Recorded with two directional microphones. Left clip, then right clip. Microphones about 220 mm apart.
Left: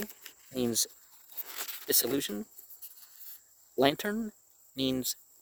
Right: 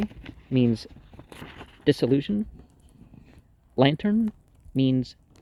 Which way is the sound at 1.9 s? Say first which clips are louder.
Right 9 dB; 40° left (ahead or behind).